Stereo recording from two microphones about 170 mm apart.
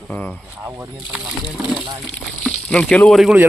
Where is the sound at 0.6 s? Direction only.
15° right (ahead or behind).